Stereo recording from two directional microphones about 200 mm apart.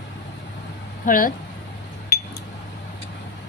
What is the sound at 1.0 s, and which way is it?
Speech, 45° left (ahead or behind).